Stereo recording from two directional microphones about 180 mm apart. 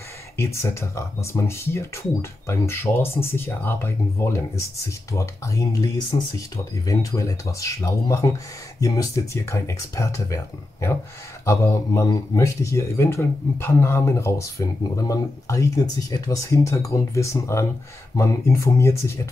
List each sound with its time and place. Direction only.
0.4 s speech: 15° left (ahead or behind)